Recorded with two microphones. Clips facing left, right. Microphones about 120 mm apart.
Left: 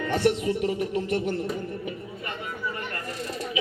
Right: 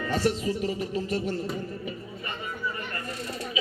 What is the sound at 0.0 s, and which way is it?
Speech, 65° left (ahead or behind).